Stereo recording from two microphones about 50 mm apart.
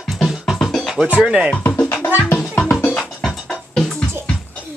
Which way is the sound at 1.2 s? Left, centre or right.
Centre.